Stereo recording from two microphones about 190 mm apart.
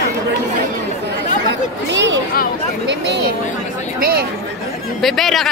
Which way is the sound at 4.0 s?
55° right (ahead or behind).